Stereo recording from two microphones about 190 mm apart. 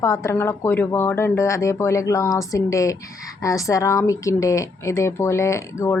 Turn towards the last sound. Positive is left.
turn(degrees=15)  # may be behind; listen again after turning